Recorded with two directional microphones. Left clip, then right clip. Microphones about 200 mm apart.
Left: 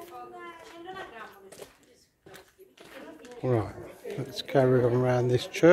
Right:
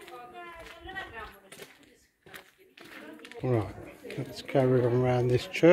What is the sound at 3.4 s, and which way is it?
Speech, centre (ahead or behind).